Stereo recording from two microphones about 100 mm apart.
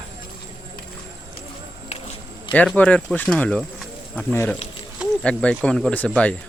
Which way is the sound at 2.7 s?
15° left (ahead or behind).